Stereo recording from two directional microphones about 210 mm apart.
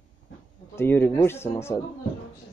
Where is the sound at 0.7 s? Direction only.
10° left (ahead or behind).